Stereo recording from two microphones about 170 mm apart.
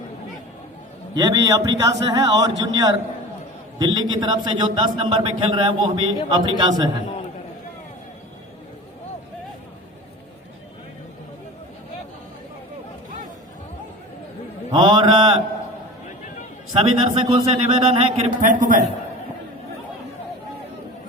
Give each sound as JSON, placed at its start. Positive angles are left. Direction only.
{"t": 1.1, "sound": "a man's voice", "side_deg": -25}
{"t": 14.7, "sound": "mantra", "side_deg": -25}
{"t": 16.7, "sound": "a man's voice", "side_deg": -35}